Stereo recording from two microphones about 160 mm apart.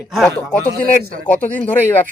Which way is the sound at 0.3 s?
10° left (ahead or behind).